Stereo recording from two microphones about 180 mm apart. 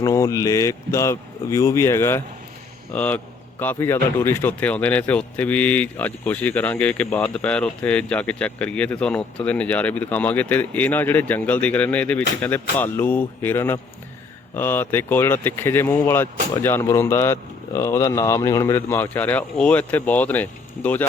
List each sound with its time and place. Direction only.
0.0 s speech: 15° left (ahead or behind)